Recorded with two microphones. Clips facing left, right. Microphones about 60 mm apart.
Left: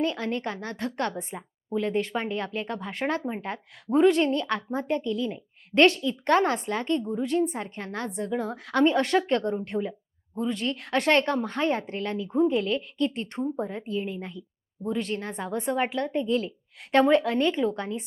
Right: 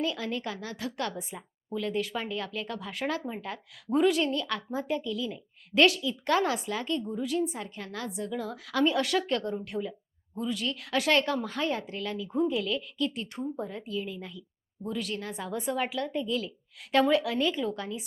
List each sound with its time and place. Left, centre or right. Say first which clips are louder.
0.0 s a woman's voice: left 4 dB; left
1.4 s speech: left 7 dB; left
1.9 s a woman's voice: left 2 dB; left
13.7 s a woman's voice: left 4 dB; left